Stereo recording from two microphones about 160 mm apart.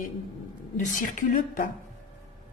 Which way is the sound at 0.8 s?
55° left (ahead or behind).